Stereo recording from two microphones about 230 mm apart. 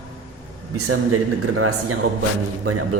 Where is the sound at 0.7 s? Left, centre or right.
Right.